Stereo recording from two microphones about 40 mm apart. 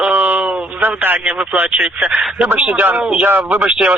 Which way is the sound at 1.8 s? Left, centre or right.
Right.